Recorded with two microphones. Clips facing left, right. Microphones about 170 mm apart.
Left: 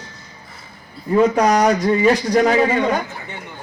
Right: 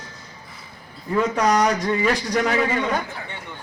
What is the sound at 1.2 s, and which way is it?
A man's voice, 35° left (ahead or behind).